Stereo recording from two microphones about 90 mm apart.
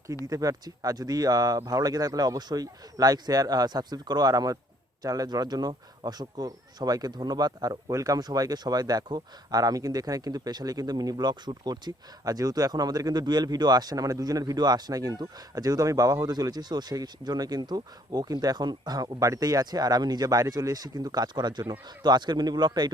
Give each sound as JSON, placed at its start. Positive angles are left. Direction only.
{"t": 0.3, "sound": "speech", "side_deg": -40}